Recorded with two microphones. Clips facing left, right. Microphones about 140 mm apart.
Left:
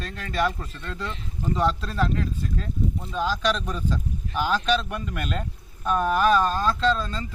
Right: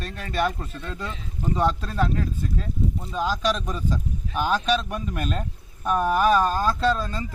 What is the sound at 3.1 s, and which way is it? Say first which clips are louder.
Speech: even; 10° right (ahead or behind).